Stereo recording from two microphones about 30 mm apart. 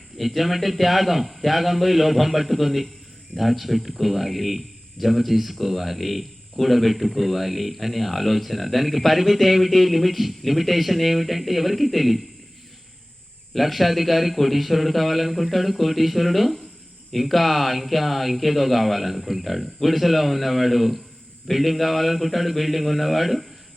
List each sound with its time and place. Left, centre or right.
0.2 s a man's voice: centre
13.5 s a man's voice: centre